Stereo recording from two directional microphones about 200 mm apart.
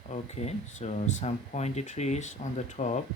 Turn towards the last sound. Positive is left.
turn(degrees=40)  # may be behind; listen again after turning